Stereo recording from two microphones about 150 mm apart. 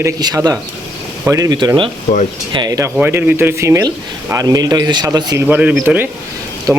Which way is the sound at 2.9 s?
15° right (ahead or behind).